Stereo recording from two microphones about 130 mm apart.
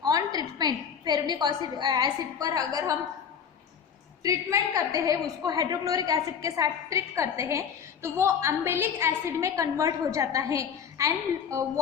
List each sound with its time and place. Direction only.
0.0 s a woman's voice: 30° right (ahead or behind)
4.2 s a woman's voice: 25° right (ahead or behind)